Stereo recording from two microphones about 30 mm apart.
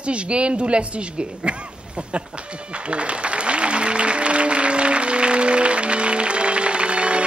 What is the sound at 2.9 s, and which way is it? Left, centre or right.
Applause, right.